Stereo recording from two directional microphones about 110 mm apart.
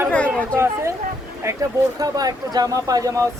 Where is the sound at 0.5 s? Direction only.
25° right (ahead or behind).